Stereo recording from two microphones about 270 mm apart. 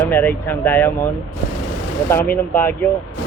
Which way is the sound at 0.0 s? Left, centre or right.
Centre.